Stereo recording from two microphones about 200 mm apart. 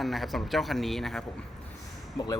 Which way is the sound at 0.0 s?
Centre (ahead or behind).